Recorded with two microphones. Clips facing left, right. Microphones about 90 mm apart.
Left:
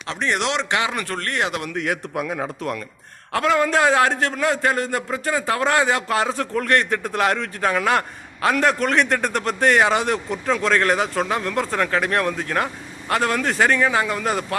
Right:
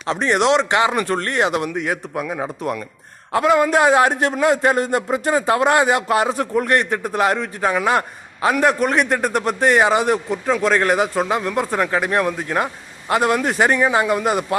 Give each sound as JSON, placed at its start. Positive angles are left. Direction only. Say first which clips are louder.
{"t": 0.3, "sound": "a man's voice", "louder": "right 6 dB", "side_deg": -5}
{"t": 0.5, "sound": "speech", "louder": "right 6 dB", "side_deg": -35}
{"t": 1.1, "sound": "speech", "louder": "right 5 dB", "side_deg": -20}
{"t": 1.4, "sound": "a man's voice", "louder": "right 4 dB", "side_deg": -5}